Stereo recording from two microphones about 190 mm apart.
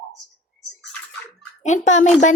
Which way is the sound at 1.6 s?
40° left (ahead or behind).